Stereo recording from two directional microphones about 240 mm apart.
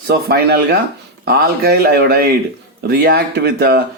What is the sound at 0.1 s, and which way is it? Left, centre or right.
A man's voice, right.